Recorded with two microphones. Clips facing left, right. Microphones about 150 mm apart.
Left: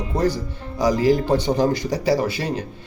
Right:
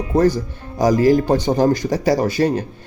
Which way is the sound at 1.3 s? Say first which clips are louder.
Right 3 dB; 45° right (ahead or behind).